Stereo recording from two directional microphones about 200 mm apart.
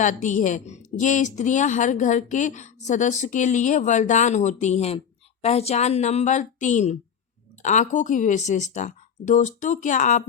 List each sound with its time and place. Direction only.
0.0 s a woman's voice: 40° left (ahead or behind)